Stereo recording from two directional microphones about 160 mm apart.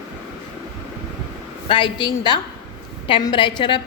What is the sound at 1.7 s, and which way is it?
A woman's voice, 30° left (ahead or behind).